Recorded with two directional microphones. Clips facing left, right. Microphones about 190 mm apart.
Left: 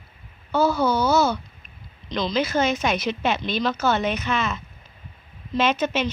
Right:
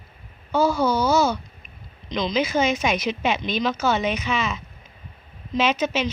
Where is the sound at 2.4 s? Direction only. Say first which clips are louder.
Right 1 dB; 10° right (ahead or behind).